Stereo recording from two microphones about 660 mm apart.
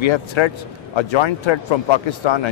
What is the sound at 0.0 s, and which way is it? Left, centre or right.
A man's voice, left.